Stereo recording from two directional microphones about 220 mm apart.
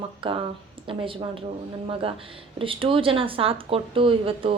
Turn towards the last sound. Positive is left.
turn(degrees=-25)  # may be behind; listen again after turning